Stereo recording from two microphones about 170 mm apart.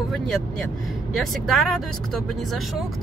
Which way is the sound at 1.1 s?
Centre (ahead or behind).